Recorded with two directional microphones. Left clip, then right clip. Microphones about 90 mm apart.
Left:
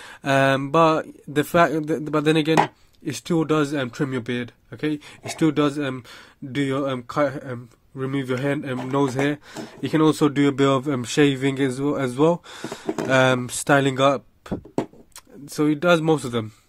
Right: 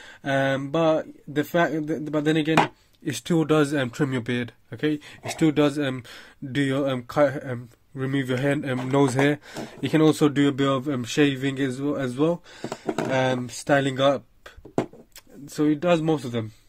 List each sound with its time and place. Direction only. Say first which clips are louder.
0.0 s speech: left 5 dB; 45° left (ahead or behind)
3.1 s speech: left 1 dB; 20° left (ahead or behind)
3.3 s speech: even; centre (ahead or behind)
5.3 s speech: even; 20° left (ahead or behind)
6.5 s speech: even; 10° left (ahead or behind)
9.8 s speech: left 1 dB; 15° left (ahead or behind)
10.6 s speech: left 4 dB; 40° left (ahead or behind)
15.4 s speech: left 3 dB; 35° left (ahead or behind); by 16.4 s 60° left (ahead or behind)